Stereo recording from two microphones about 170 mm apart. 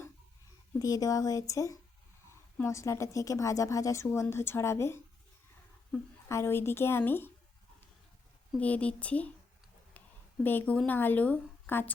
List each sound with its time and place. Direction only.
0.8 s a woman's voice: 20° left (ahead or behind)
6.2 s a woman's voice: 15° left (ahead or behind)
8.5 s a woman's voice: 10° left (ahead or behind)
10.0 s a sound: 10° left (ahead or behind)
10.4 s a woman's voice: 10° left (ahead or behind)